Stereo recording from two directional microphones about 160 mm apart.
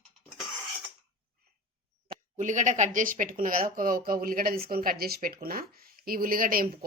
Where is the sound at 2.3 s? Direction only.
50° right (ahead or behind).